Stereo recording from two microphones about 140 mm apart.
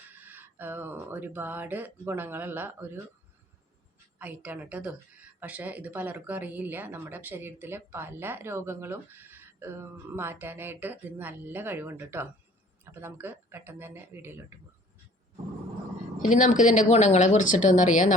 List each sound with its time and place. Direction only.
0.1 s a woman's voice: 15° right (ahead or behind)
4.2 s a woman's voice: 10° right (ahead or behind)
16.2 s speech: 65° left (ahead or behind)